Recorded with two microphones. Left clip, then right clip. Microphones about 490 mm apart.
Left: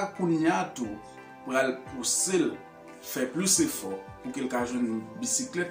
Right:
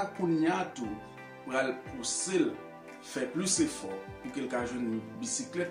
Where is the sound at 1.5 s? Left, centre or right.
Right.